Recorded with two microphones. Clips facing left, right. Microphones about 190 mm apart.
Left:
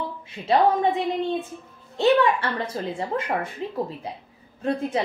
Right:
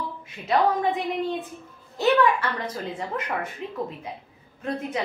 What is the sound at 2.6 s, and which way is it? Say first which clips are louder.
A woman's voice: left 3 dB; 30° left (ahead or behind).